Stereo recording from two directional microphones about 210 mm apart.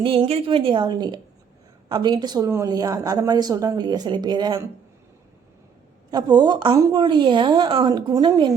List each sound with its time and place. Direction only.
0.0 s a woman's voice: 25° right (ahead or behind)
6.1 s a woman's voice: 20° right (ahead or behind)